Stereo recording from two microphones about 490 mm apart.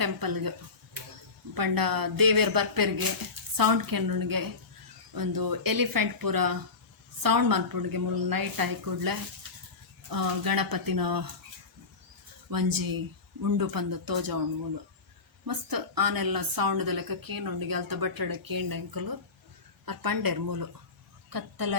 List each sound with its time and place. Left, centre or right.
0.0 s a woman's voice: right
1.5 s a woman's voice: right
12.5 s a woman's voice: right
15.4 s a woman's voice: right